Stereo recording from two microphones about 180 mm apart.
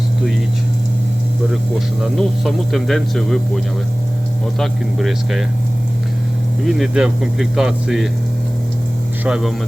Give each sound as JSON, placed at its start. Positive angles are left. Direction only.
{"t": 2.0, "sound": "speech", "side_deg": 0}
{"t": 6.7, "sound": "speech", "side_deg": 0}
{"t": 9.2, "sound": "speech", "side_deg": -5}